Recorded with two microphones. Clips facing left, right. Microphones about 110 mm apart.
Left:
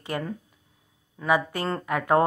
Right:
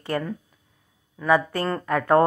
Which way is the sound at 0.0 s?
15° left (ahead or behind).